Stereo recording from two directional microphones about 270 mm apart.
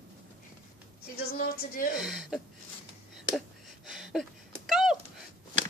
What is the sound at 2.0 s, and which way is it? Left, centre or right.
Speech, centre.